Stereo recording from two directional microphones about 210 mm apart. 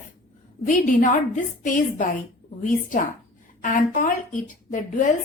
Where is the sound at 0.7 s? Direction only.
35° left (ahead or behind).